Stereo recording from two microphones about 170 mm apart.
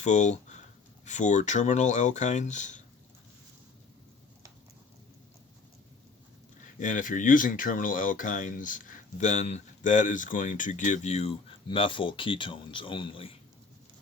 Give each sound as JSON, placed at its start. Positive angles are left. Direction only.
{"t": 0.0, "sound": "speech", "side_deg": 45}
{"t": 6.7, "sound": "speech", "side_deg": 50}